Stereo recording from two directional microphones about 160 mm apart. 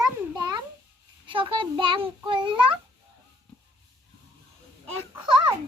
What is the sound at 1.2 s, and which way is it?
A child's voice, 30° right (ahead or behind).